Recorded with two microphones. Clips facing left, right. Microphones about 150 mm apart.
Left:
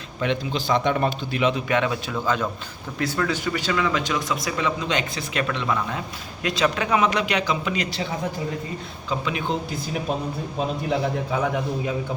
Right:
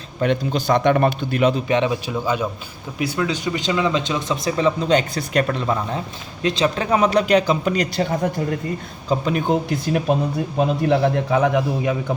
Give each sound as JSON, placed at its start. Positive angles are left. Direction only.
{"t": 0.2, "sound": "a man's voice", "side_deg": -45}
{"t": 1.6, "sound": "a man's voice", "side_deg": -25}
{"t": 9.6, "sound": "a man's voice", "side_deg": -65}